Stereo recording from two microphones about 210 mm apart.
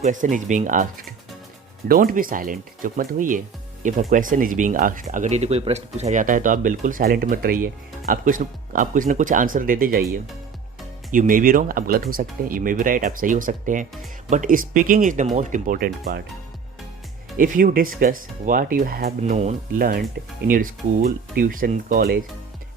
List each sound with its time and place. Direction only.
0.0 s speech: 35° right (ahead or behind)
11.1 s speech: 40° right (ahead or behind)
17.3 s speech: 40° right (ahead or behind)